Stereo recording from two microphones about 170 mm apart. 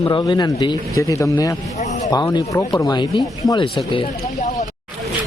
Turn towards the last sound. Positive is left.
turn(degrees=30)  # may be behind; listen again after turning